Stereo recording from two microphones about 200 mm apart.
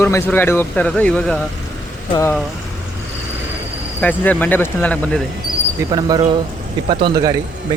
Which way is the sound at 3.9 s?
10° left (ahead or behind).